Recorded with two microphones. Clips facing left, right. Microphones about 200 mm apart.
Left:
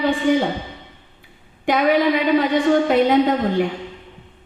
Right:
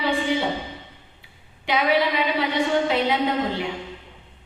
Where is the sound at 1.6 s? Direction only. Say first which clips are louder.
Left 5 dB; 50° left (ahead or behind).